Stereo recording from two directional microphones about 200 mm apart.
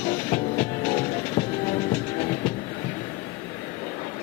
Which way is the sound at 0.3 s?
20° left (ahead or behind).